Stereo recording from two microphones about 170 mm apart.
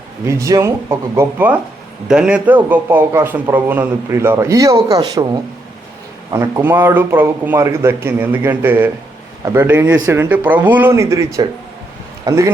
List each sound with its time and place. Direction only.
0.3 s a man's voice: 20° right (ahead or behind)
6.3 s a man's voice: 20° right (ahead or behind)